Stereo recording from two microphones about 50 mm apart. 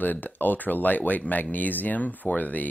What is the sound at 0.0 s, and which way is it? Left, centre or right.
Speech, left.